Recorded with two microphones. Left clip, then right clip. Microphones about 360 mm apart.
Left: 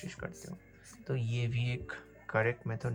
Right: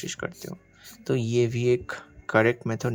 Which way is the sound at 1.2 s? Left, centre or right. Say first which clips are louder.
Right 16 dB; centre.